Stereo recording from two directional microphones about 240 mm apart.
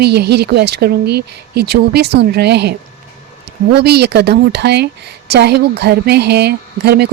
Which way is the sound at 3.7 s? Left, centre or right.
Right.